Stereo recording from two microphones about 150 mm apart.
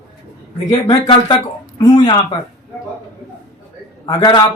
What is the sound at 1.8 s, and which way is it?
Speech, 30° left (ahead or behind).